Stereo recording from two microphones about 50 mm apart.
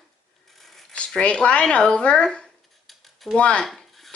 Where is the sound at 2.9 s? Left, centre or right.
Centre.